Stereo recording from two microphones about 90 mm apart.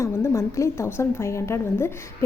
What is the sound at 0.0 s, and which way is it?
A woman's voice, 35° left (ahead or behind).